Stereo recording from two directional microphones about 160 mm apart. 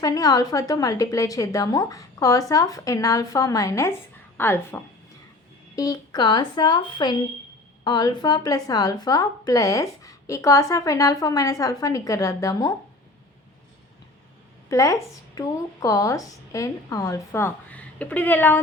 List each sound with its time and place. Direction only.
0.0 s a woman's voice: 25° left (ahead or behind)
14.7 s a woman's voice: 20° left (ahead or behind)